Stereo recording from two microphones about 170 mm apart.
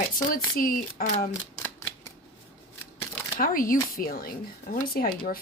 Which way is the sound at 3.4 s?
55° left (ahead or behind).